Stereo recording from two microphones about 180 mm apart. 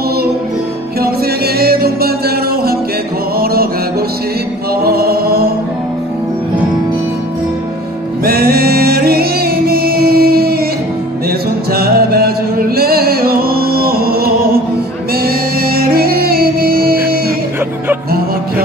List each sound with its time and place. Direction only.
1.6 s music: 60° right (ahead or behind)
4.8 s chant: 60° right (ahead or behind)
8.2 s music: 55° right (ahead or behind)
11.7 s music: 60° right (ahead or behind)